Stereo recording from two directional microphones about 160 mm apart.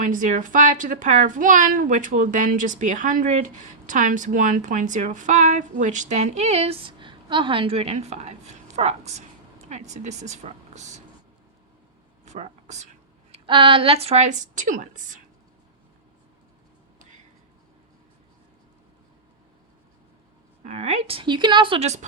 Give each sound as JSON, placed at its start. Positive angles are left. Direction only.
{"t": 0.0, "sound": "a woman's voice", "side_deg": -55}
{"t": 12.2, "sound": "a sound", "side_deg": -45}
{"t": 13.3, "sound": "speech", "side_deg": -30}
{"t": 20.7, "sound": "speech", "side_deg": -45}